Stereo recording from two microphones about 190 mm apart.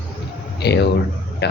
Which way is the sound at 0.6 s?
60° left (ahead or behind).